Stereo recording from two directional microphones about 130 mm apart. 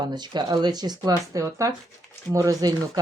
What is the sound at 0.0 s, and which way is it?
Speech, 35° right (ahead or behind).